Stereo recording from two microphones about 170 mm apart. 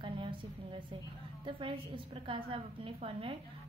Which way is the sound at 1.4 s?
30° right (ahead or behind).